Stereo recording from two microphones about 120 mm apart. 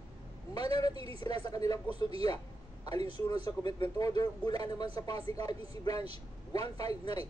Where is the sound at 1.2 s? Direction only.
35° left (ahead or behind).